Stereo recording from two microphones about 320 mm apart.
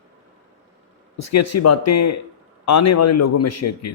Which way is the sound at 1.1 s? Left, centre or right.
Left.